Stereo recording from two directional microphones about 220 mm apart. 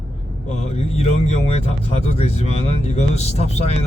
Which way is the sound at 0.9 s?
30° left (ahead or behind).